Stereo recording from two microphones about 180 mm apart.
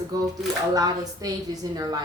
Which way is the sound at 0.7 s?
20° right (ahead or behind).